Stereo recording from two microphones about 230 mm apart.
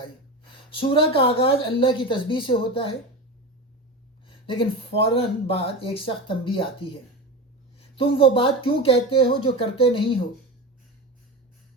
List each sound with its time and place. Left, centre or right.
0.7 s speech: left
4.3 s speech: left
7.9 s speech: left